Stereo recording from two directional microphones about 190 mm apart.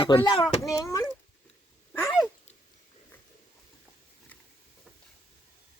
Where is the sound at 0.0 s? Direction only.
25° left (ahead or behind).